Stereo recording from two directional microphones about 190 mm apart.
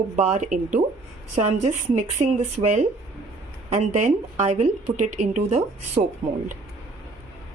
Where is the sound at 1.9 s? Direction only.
40° right (ahead or behind).